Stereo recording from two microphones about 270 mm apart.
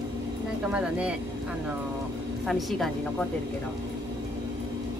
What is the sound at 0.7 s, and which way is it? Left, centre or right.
Speech, centre.